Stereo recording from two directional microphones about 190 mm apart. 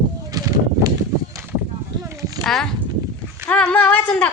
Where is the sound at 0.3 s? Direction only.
20° right (ahead or behind).